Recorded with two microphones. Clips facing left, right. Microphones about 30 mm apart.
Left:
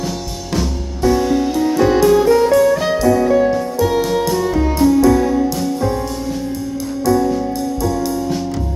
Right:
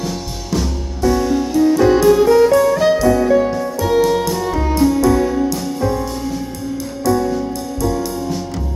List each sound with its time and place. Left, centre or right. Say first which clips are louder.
1.5 s music: right 3 dB; centre
1.8 s music: left 1 dB; centre